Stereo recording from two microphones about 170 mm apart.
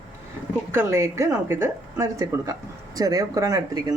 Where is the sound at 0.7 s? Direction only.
15° right (ahead or behind).